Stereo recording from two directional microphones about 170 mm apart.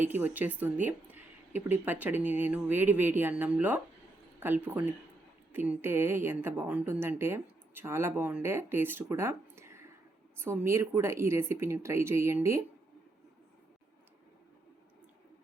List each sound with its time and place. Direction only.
0.0 s a woman's voice: 10° right (ahead or behind)